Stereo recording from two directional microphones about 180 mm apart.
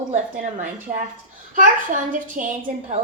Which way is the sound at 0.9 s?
50° right (ahead or behind).